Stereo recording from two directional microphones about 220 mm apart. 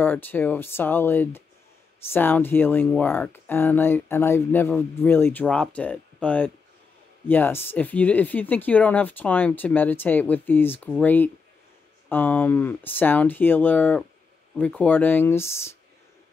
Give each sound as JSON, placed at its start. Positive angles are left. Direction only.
{"t": 0.0, "sound": "speech", "side_deg": 10}